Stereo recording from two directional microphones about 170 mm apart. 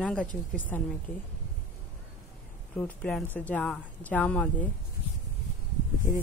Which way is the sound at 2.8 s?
5° left (ahead or behind).